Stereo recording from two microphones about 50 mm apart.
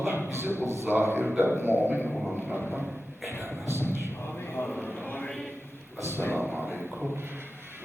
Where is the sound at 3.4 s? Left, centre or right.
Right.